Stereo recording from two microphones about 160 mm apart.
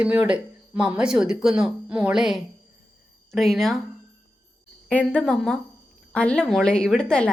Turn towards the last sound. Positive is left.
turn(degrees=5)  # may be behind; listen again after turning